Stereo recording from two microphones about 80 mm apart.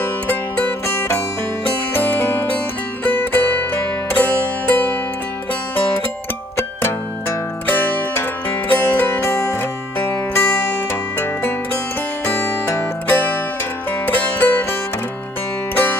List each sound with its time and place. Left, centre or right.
0.0 s music: left
7.6 s music: left